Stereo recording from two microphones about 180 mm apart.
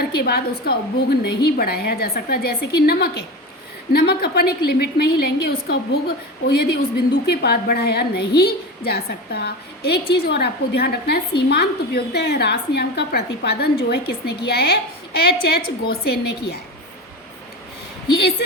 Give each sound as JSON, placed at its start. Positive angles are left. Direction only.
{"t": 0.0, "sound": "a woman's voice", "side_deg": 60}